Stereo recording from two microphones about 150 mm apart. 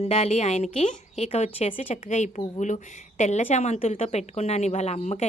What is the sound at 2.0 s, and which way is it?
A woman's voice, 55° left (ahead or behind).